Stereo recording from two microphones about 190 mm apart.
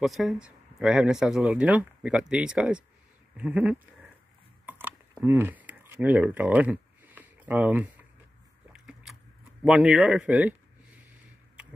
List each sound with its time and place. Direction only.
0.0 s speech: centre (ahead or behind)
4.6 s a sound: 10° right (ahead or behind)
8.7 s biting: 5° right (ahead or behind)
9.6 s speech: 5° right (ahead or behind)